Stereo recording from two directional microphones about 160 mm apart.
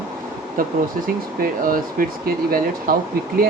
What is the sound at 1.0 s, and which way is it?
Speech, 60° right (ahead or behind).